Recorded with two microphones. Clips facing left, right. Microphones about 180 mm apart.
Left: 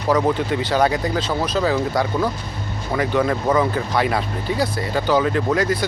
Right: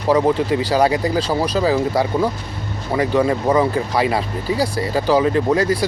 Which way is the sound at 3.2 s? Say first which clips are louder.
Right 2 dB; 10° right (ahead or behind).